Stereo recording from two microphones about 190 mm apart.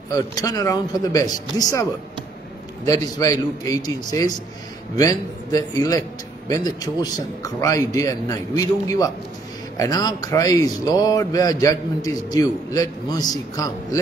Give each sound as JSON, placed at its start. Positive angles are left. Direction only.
{"t": 0.1, "sound": "a man's voice", "side_deg": 20}